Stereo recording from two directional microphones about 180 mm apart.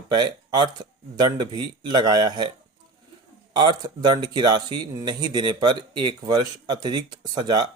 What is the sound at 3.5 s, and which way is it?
Speech, 25° right (ahead or behind).